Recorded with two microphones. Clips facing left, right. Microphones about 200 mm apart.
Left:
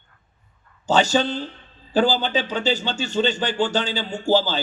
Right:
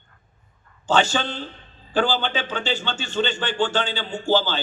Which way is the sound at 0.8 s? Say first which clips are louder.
Left 2 dB; 40° left (ahead or behind).